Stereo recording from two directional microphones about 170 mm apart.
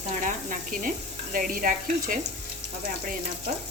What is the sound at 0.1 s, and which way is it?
Sizzle, 50° right (ahead or behind).